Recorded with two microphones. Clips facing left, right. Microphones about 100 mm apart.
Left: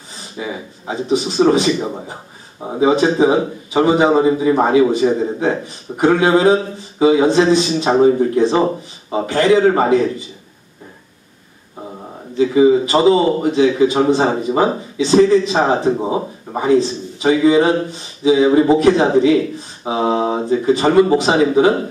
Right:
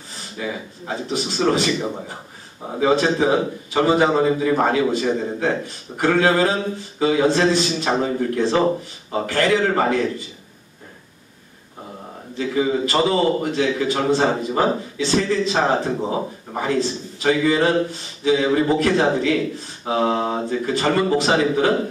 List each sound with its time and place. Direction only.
0.4 s a man's voice: 20° left (ahead or behind)
12.4 s a man's voice: 20° left (ahead or behind)